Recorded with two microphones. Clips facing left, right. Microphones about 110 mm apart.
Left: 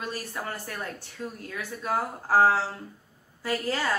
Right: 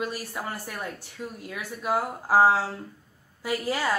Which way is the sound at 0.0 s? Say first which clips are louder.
Right 2 dB; 10° right (ahead or behind).